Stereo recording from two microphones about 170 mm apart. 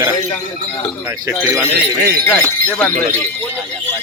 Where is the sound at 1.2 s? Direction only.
15° right (ahead or behind).